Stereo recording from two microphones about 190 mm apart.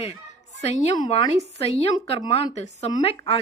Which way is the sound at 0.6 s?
35° left (ahead or behind).